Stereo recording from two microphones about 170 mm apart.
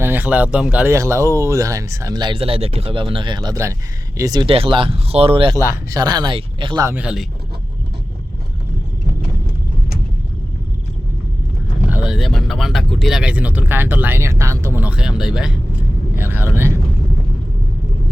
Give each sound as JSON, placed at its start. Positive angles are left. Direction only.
{"t": 0.0, "sound": "speech", "side_deg": -10}
{"t": 5.5, "sound": "speech", "side_deg": -15}
{"t": 6.8, "sound": "speech", "side_deg": -5}
{"t": 11.9, "sound": "speech", "side_deg": -5}